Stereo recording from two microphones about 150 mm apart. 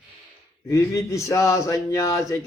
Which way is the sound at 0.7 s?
20° left (ahead or behind).